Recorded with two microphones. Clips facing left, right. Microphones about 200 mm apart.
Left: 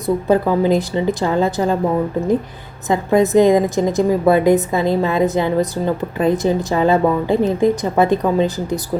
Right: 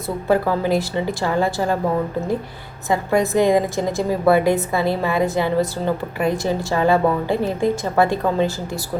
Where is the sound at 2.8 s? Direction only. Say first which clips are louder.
Left 4 dB; 20° left (ahead or behind).